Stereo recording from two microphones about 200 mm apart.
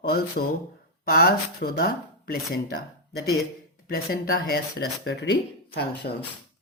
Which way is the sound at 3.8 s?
50° left (ahead or behind).